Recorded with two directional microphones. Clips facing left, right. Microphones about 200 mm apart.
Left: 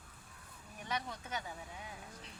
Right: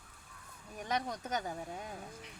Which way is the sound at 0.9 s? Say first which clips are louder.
Right 5 dB; 40° right (ahead or behind).